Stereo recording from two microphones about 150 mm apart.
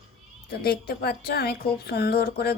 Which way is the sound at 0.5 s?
90° left.